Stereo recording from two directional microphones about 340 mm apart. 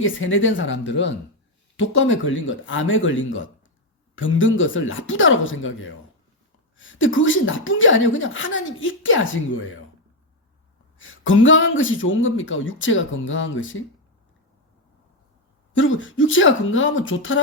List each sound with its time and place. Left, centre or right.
0.0 s a woman's voice: left
10.9 s a woman's voice: left
15.7 s a woman's voice: left